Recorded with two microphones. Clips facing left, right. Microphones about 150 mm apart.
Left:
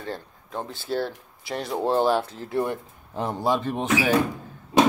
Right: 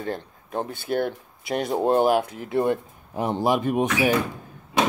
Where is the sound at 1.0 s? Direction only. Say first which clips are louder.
Right 4 dB; 20° right (ahead or behind).